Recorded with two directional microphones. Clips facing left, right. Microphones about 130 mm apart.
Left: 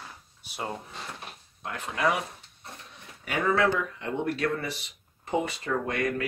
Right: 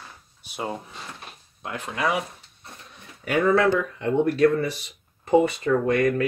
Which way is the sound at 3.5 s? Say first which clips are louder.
Right 3 dB; 40° right (ahead or behind).